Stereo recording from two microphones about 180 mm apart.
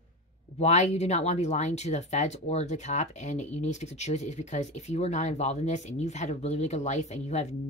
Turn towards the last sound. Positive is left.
turn(degrees=40)  # may be behind; listen again after turning